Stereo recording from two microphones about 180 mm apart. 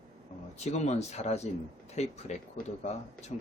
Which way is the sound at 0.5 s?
40° left (ahead or behind).